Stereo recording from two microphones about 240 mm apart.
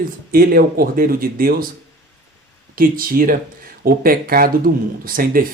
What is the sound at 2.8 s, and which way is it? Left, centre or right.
Speech, right.